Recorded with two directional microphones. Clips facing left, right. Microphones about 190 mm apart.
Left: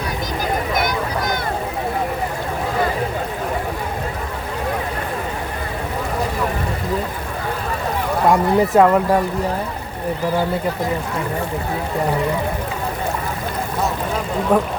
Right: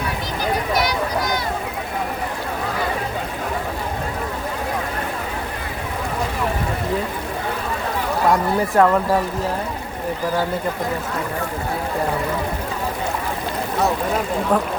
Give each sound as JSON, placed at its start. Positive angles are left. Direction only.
{"t": 0.8, "sound": "a sound", "side_deg": 55}
{"t": 8.3, "sound": "speech", "side_deg": 15}
{"t": 14.5, "sound": "speech", "side_deg": 10}